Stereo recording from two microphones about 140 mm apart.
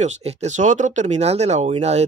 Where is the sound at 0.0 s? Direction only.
50° right (ahead or behind).